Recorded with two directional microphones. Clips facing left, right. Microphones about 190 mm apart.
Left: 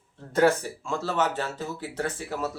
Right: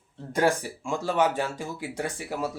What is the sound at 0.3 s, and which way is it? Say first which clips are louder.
Speech: left 3 dB; 15° right (ahead or behind).